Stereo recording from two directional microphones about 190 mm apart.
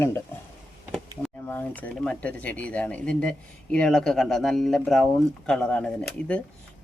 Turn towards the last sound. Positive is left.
turn(degrees=5)  # may be behind; listen again after turning